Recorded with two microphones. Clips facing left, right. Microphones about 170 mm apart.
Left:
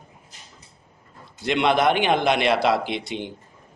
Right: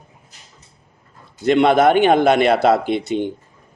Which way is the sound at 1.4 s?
45° right (ahead or behind).